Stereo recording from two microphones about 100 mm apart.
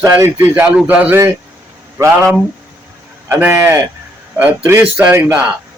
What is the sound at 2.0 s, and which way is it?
A man's voice, 30° right (ahead or behind).